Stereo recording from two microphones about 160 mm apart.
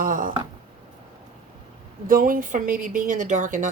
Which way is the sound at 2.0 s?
60° right (ahead or behind).